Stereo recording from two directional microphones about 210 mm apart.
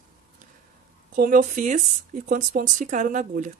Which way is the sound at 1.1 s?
40° right (ahead or behind).